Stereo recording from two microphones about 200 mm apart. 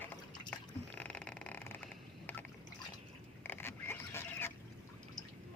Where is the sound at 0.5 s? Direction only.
5° left (ahead or behind).